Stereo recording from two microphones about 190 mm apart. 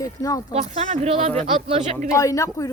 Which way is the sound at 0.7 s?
30° right (ahead or behind).